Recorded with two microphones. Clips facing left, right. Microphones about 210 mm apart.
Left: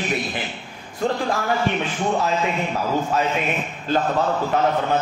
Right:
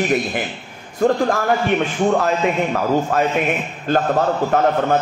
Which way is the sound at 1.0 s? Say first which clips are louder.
Right 6 dB; 50° right (ahead or behind).